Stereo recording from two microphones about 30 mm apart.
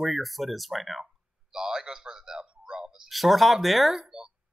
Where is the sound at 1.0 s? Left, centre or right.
Right.